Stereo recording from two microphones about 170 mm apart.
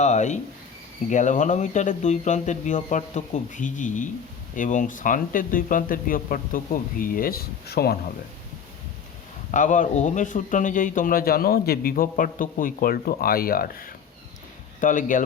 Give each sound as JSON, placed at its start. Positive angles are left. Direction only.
{"t": 0.0, "sound": "a man's voice", "side_deg": 45}
{"t": 9.5, "sound": "a man's voice", "side_deg": 50}